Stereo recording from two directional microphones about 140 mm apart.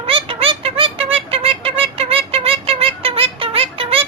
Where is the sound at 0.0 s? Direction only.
40° right (ahead or behind).